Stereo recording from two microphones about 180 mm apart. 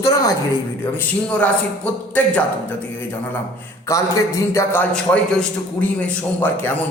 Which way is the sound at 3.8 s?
15° left (ahead or behind).